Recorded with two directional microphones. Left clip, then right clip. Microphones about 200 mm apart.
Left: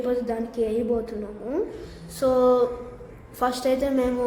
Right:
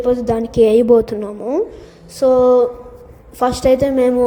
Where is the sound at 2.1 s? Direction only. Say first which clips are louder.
Right 8 dB; 25° right (ahead or behind).